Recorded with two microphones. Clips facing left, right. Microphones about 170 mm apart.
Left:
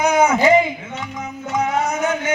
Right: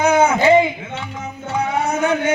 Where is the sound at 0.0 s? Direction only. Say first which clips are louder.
Right 1 dB; 30° right (ahead or behind).